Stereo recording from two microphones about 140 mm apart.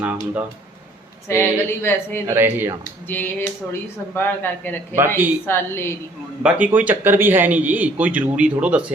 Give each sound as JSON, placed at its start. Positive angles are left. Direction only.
{"t": 0.0, "sound": "a man's voice", "side_deg": -10}
{"t": 1.3, "sound": "speech", "side_deg": 15}
{"t": 2.2, "sound": "a man's voice", "side_deg": -15}
{"t": 3.1, "sound": "speech", "side_deg": 15}
{"t": 4.9, "sound": "a man's voice", "side_deg": -15}
{"t": 5.5, "sound": "speech", "side_deg": 15}
{"t": 6.4, "sound": "a man's voice", "side_deg": -10}